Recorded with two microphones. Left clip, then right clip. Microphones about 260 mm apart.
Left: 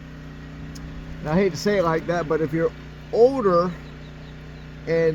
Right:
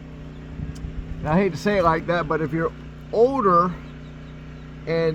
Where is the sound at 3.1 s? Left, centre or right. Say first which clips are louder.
Left 2 dB; right.